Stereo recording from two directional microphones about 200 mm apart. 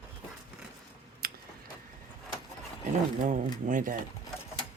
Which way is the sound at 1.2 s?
50° right (ahead or behind).